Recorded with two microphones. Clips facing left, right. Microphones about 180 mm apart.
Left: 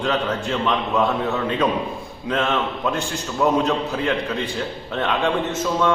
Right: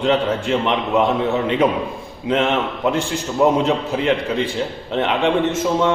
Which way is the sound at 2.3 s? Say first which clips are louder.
Right 4 dB; 20° right (ahead or behind).